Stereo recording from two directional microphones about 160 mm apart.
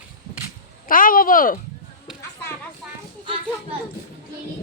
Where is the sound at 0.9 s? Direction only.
60° left (ahead or behind).